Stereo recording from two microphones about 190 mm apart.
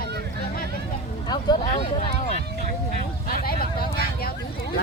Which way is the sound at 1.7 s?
35° left (ahead or behind).